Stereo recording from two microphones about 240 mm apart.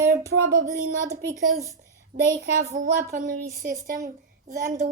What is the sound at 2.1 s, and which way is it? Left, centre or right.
Speech, right.